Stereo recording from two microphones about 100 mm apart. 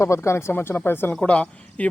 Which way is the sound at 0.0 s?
30° left (ahead or behind).